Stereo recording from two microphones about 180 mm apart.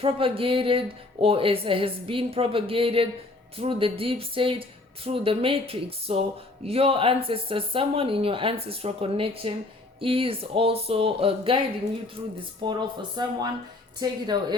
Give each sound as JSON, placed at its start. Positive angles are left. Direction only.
{"t": 0.0, "sound": "speech", "side_deg": -30}
{"t": 12.6, "sound": "speech", "side_deg": -25}